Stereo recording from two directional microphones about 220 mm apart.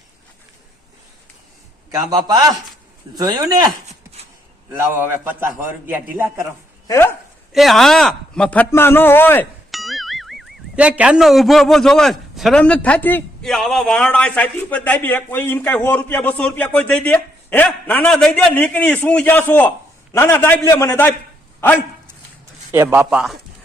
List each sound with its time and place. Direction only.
2.0 s a man's voice: 20° right (ahead or behind)
4.7 s a man's voice: 10° right (ahead or behind)
6.8 s speech: 15° left (ahead or behind)
7.5 s a man's voice: centre (ahead or behind)
22.7 s a man's voice: 10° right (ahead or behind)